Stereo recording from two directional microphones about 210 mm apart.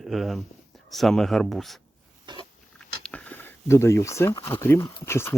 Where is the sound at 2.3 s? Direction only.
20° right (ahead or behind).